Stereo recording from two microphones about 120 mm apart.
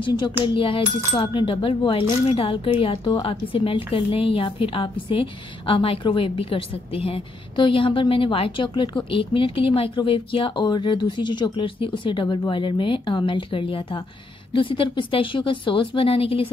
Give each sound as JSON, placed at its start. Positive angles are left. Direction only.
{"t": 0.0, "sound": "speech", "side_deg": 40}